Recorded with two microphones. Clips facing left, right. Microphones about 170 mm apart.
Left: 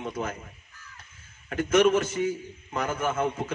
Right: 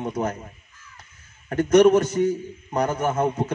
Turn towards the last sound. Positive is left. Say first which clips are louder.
# right 5 dB
turn(degrees=-40)  # may be behind; listen again after turning